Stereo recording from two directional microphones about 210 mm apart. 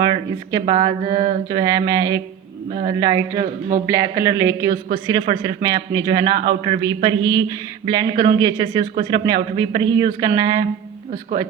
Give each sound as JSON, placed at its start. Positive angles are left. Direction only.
{"t": 0.0, "sound": "a man's voice", "side_deg": -20}
{"t": 1.5, "sound": "a man's voice", "side_deg": -20}